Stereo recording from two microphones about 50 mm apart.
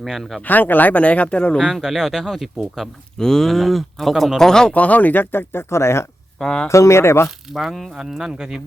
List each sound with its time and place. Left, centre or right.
0.0 s speech: centre
0.4 s speech: left
1.6 s speech: centre
3.2 s speech: centre
4.4 s speech: centre
4.7 s speech: left
6.4 s speech: centre
6.7 s speech: left
7.5 s speech: centre